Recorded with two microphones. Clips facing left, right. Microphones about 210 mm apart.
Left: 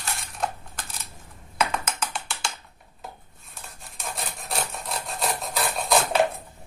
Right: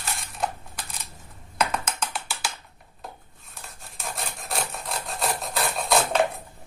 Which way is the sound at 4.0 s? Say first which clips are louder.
Even; centre (ahead or behind).